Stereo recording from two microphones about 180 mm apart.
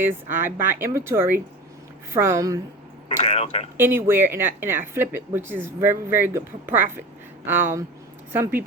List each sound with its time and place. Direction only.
0.0 s speech: 10° right (ahead or behind)
3.1 s speech: 35° left (ahead or behind)
3.8 s speech: 15° right (ahead or behind)